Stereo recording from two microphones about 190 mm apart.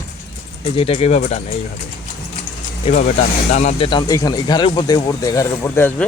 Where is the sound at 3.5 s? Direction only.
35° left (ahead or behind).